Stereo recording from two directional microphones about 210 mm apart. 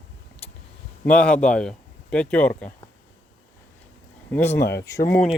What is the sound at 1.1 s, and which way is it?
Speech, 5° left (ahead or behind).